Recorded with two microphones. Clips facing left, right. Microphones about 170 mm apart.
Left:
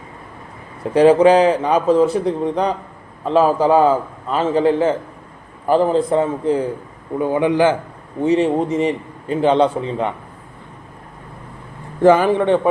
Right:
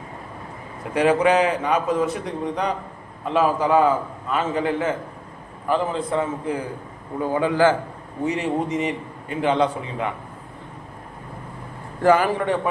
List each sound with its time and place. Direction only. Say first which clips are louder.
0.9 s a man's voice: left 7 dB; 30° left (ahead or behind)
7.2 s a man's voice: left 3 dB; 20° left (ahead or behind)
8.2 s a man's voice: left 7 dB; 30° left (ahead or behind)
12.0 s a man's voice: left 5 dB; 20° left (ahead or behind)